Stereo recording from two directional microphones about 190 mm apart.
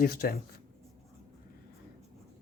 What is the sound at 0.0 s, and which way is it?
Speech, 50° left (ahead or behind).